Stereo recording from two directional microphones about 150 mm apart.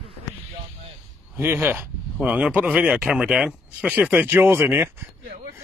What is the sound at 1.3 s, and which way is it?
Speech, 15° right (ahead or behind).